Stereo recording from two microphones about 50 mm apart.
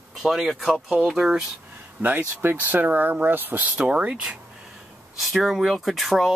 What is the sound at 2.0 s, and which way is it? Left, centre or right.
Speech, right.